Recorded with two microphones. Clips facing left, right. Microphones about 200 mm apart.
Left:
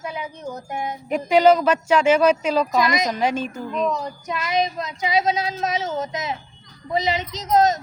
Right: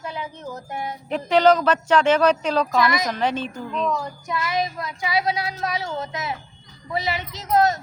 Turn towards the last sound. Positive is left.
turn(degrees=20)  # may be behind; listen again after turning